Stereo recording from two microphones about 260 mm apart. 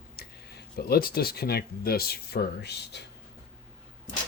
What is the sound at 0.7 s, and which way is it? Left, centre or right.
Speech, left.